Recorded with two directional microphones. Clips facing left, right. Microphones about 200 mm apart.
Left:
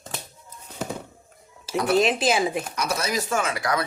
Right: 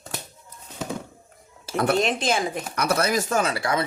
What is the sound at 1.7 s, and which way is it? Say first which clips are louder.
Speech: right 2 dB; 55° right (ahead or behind).